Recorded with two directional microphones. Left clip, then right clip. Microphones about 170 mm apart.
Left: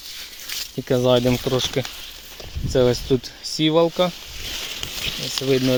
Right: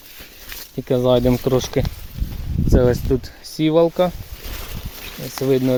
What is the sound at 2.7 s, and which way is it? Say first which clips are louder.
Speech: right 1 dB; 20° right (ahead or behind).